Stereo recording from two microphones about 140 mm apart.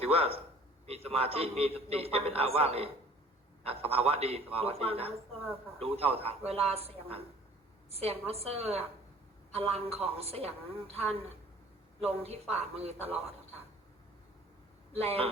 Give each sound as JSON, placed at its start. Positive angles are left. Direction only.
{"t": 0.0, "sound": "a man's voice", "side_deg": -45}
{"t": 15.0, "sound": "a man's voice", "side_deg": -45}